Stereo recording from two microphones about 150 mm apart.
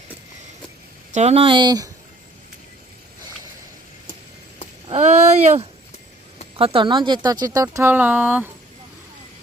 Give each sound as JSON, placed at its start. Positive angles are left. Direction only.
{"t": 1.1, "sound": "speech", "side_deg": -45}
{"t": 4.9, "sound": "speech", "side_deg": -50}
{"t": 6.6, "sound": "speech", "side_deg": -40}